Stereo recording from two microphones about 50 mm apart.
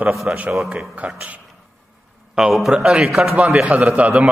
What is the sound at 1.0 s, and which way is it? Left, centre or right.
Speech, right.